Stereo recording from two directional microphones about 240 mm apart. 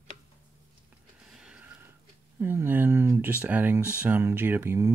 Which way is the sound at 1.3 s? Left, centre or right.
Centre.